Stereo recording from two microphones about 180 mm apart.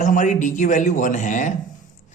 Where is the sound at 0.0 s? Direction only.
45° left (ahead or behind).